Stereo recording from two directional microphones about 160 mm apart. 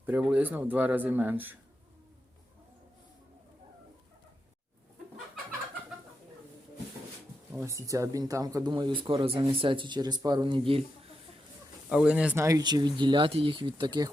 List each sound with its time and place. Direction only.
0.0 s speech: 10° right (ahead or behind)
7.5 s speech: 15° right (ahead or behind); by 10.8 s 35° right (ahead or behind)
11.9 s speech: 5° right (ahead or behind)
12.4 s speech: 20° right (ahead or behind)